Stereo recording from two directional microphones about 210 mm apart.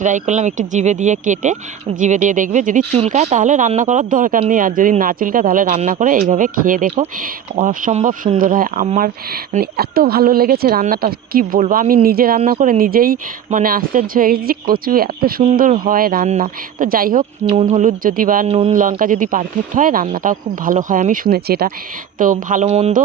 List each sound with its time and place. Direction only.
0.0 s speech: 35° right (ahead or behind)